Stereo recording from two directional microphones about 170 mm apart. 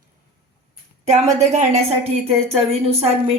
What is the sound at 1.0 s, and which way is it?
A woman's voice, 40° right (ahead or behind).